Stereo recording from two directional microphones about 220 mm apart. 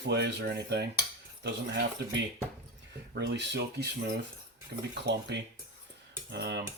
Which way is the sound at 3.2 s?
50° right (ahead or behind).